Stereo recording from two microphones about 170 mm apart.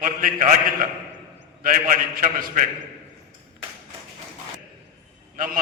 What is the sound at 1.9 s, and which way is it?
Speech, 55° right (ahead or behind).